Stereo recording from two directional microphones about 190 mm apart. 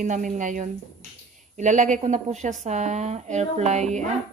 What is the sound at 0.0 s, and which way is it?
A woman's voice, 45° right (ahead or behind).